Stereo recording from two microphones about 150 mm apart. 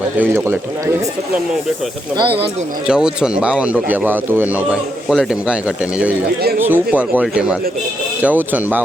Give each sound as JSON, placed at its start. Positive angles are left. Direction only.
{"t": 0.2, "sound": "a man's voice", "side_deg": -15}
{"t": 2.1, "sound": "speech", "side_deg": -35}
{"t": 2.8, "sound": "a man's voice", "side_deg": -5}